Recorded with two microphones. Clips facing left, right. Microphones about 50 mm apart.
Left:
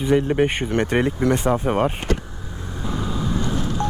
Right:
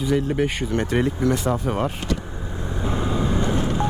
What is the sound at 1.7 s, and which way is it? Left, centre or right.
Speech, left.